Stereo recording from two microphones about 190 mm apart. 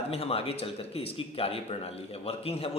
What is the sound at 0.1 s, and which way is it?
A man's voice, 30° left (ahead or behind).